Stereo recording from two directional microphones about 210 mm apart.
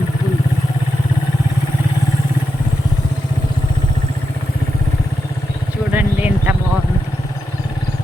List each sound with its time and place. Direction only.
5.9 s vehicle: 10° right (ahead or behind)